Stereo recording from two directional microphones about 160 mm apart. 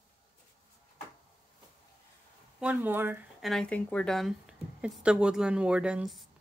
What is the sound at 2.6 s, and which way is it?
Speech, 10° right (ahead or behind).